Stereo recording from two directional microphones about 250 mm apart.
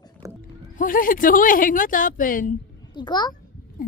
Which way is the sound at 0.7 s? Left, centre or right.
Left.